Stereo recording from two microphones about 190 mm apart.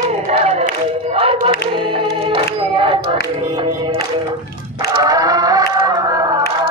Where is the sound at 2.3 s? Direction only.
30° right (ahead or behind).